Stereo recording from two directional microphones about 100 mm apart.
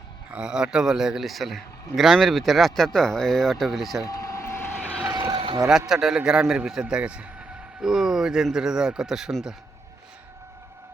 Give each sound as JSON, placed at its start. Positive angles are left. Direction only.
{"t": 0.3, "sound": "a man's voice", "side_deg": -10}
{"t": 4.0, "sound": "vehicle", "side_deg": 35}
{"t": 5.3, "sound": "vehicle", "side_deg": -60}
{"t": 5.9, "sound": "a man's voice", "side_deg": -5}